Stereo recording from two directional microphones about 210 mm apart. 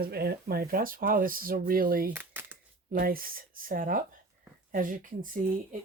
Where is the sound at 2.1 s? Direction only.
10° right (ahead or behind).